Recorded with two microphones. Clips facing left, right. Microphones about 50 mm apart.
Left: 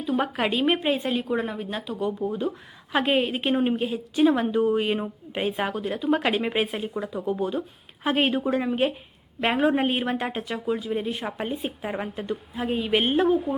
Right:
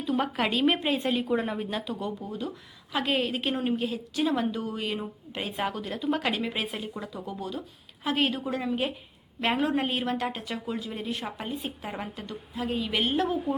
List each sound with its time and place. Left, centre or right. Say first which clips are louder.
0.0 s a woman's voice: left 2 dB; centre
2.2 s a woman's voice: left 8 dB; left
10.4 s speech: left 5 dB; centre
10.9 s a woman's voice: left 5 dB; centre
11.4 s a woman's voice: left 5 dB; left
11.8 s a woman's voice: left 5 dB; centre